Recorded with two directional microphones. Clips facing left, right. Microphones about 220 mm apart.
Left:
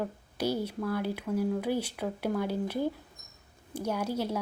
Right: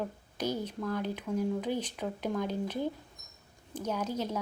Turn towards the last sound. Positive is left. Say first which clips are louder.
# left 2 dB
turn(degrees=10)  # may be behind; listen again after turning